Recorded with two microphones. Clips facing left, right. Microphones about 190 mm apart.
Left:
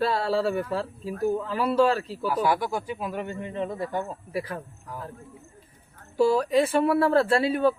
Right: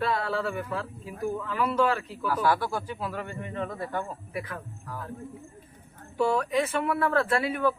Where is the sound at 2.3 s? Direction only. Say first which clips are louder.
Left 1 dB; 15° left (ahead or behind); by 4.6 s 30° left (ahead or behind).